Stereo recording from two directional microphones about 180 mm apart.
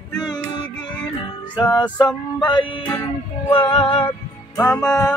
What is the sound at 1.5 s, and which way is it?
Music, 25° left (ahead or behind).